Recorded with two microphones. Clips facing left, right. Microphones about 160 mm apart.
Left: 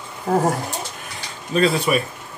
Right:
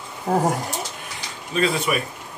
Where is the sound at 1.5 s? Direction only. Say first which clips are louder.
Left 4 dB; 35° left (ahead or behind).